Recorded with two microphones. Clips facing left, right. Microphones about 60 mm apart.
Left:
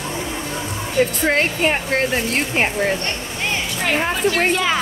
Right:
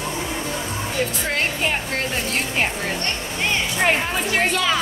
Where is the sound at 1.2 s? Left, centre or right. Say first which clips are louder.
Left 5 dB; left.